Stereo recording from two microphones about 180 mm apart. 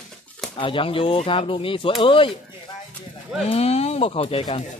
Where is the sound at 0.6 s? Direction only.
30° left (ahead or behind).